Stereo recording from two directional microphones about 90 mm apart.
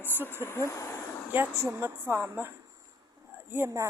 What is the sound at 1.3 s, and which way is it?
A woman's voice, 25° right (ahead or behind).